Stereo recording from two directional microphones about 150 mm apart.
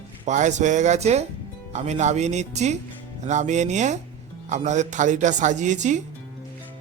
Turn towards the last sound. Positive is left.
turn(degrees=-55)  # may be behind; listen again after turning